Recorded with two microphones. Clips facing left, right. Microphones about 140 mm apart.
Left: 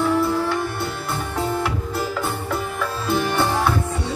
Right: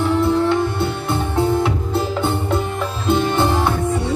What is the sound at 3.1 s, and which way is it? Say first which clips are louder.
Music: right 4 dB; 20° right (ahead or behind).